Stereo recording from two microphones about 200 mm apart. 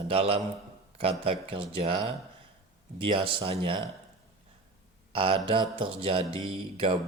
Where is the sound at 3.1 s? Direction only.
25° right (ahead or behind).